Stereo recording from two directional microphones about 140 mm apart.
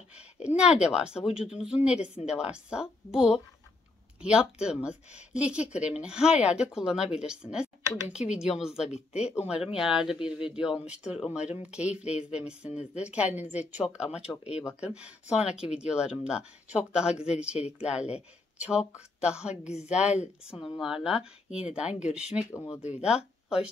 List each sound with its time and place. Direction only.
0.6 s speech: 5° right (ahead or behind)
22.5 s speech: 20° left (ahead or behind)
22.8 s speech: 10° right (ahead or behind)